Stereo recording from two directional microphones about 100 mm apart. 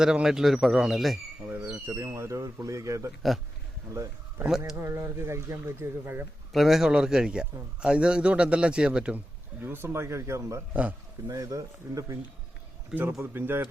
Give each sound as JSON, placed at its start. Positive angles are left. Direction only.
{"t": 0.0, "sound": "speech", "side_deg": -5}
{"t": 1.5, "sound": "bird", "side_deg": -20}
{"t": 1.9, "sound": "a man's voice", "side_deg": -30}
{"t": 4.4, "sound": "speech", "side_deg": -5}
{"t": 4.8, "sound": "speech", "side_deg": -25}
{"t": 6.5, "sound": "a man's voice", "side_deg": 0}
{"t": 9.6, "sound": "speech", "side_deg": -20}
{"t": 12.9, "sound": "speech", "side_deg": -20}